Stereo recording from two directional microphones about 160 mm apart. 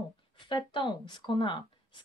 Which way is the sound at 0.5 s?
30° left (ahead or behind).